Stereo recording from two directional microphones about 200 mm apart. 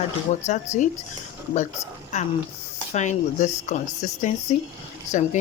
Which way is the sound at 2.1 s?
35° left (ahead or behind).